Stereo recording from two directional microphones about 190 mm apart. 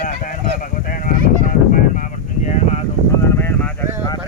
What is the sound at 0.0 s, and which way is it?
Honk, 45° left (ahead or behind).